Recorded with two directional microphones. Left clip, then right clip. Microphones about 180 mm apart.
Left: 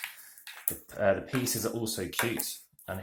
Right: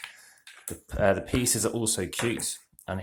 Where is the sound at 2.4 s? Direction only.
30° right (ahead or behind).